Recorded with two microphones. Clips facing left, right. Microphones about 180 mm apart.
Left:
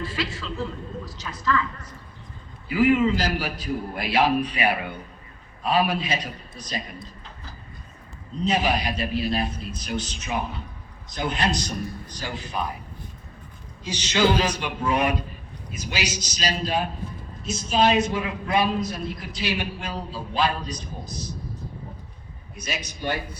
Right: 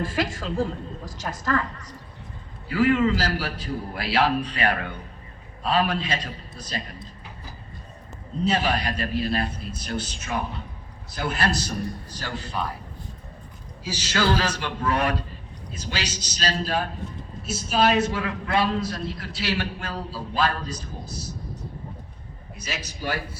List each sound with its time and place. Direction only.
0.0 s a woman's voice: 45° right (ahead or behind)
2.6 s a man's voice: 10° left (ahead or behind)
8.4 s a man's voice: 10° left (ahead or behind)
11.1 s a man's voice: 5° right (ahead or behind)
12.2 s a man's voice: 10° left (ahead or behind)
13.8 s a man's voice: 5° right (ahead or behind)
14.2 s a man's voice: 15° left (ahead or behind)
20.7 s a man's voice: 10° right (ahead or behind)
22.8 s a man's voice: 5° right (ahead or behind)